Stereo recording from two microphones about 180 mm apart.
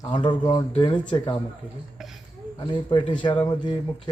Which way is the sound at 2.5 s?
25° left (ahead or behind).